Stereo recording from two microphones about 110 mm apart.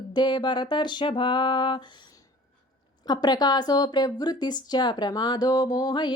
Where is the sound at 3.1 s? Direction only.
40° left (ahead or behind).